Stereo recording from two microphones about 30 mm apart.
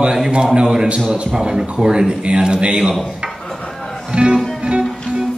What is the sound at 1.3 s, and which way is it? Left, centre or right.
Speech, right.